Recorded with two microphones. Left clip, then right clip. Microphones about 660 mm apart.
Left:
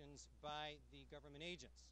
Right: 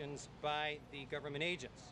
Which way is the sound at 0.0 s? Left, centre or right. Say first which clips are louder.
Right 13 dB; left.